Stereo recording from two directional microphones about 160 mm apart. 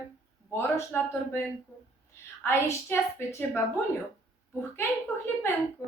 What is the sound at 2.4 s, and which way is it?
A woman's voice, 15° left (ahead or behind).